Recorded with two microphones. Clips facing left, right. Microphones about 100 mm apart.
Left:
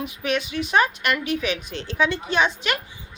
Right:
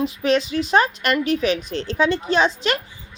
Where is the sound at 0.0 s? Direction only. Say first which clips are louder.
Right 6 dB; 35° right (ahead or behind).